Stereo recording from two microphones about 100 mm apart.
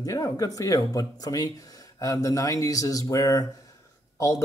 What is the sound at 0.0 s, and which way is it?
A man's voice, 35° left (ahead or behind).